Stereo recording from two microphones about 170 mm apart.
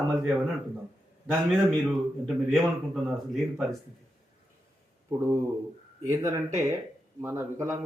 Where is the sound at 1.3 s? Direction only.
Centre (ahead or behind).